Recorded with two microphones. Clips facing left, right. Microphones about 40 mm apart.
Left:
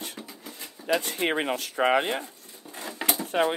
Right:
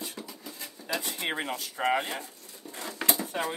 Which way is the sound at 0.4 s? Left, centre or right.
Left.